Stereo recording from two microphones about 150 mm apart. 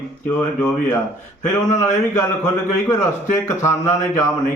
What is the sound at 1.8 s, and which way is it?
Speech, 20° left (ahead or behind).